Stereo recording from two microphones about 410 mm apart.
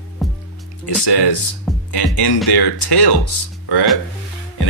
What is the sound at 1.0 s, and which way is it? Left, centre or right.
Speech, left.